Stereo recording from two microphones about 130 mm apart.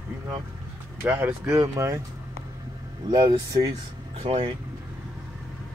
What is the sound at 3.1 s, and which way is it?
Speech, 35° right (ahead or behind).